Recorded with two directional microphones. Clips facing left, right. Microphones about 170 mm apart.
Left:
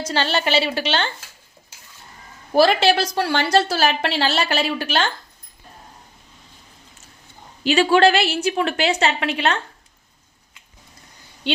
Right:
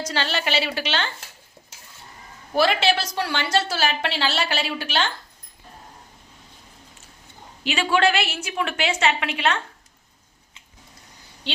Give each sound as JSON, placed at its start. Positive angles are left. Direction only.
{"t": 0.0, "sound": "a woman's voice", "side_deg": 30}
{"t": 2.6, "sound": "a woman's voice", "side_deg": 40}
{"t": 7.6, "sound": "a woman's voice", "side_deg": 35}